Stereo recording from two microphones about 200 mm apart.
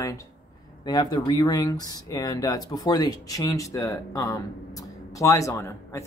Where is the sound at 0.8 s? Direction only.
20° left (ahead or behind).